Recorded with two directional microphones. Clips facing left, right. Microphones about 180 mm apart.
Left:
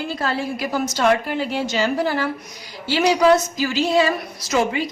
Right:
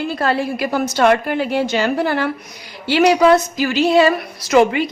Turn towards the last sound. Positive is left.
turn(degrees=-60)  # may be behind; listen again after turning